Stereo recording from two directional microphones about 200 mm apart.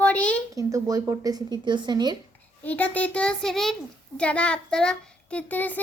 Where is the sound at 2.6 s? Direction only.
10° left (ahead or behind).